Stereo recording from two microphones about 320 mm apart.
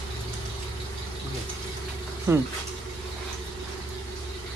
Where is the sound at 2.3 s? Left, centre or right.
Centre.